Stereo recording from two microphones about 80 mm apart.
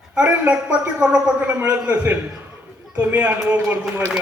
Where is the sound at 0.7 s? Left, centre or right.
Centre.